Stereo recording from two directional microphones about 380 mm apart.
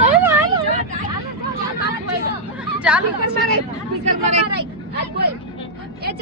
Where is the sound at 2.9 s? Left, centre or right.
Centre.